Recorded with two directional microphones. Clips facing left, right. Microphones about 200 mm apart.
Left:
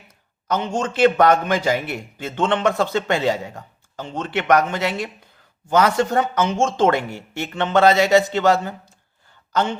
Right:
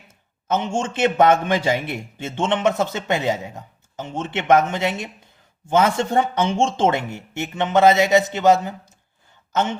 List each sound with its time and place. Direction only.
0.4 s a man's voice: 25° right (ahead or behind)